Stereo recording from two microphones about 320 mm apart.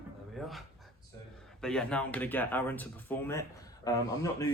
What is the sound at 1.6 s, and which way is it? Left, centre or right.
A man's voice, centre.